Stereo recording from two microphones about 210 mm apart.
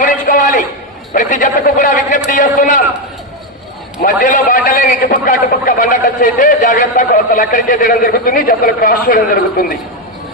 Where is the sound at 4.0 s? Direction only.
40° left (ahead or behind).